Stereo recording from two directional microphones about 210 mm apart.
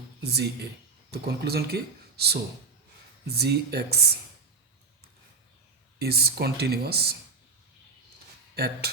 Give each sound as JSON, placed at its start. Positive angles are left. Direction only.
{"t": 0.2, "sound": "speech", "side_deg": -50}
{"t": 6.0, "sound": "speech", "side_deg": -50}
{"t": 8.5, "sound": "speech", "side_deg": -50}